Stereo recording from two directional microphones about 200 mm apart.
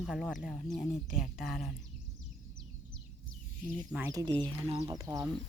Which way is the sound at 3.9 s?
15° right (ahead or behind).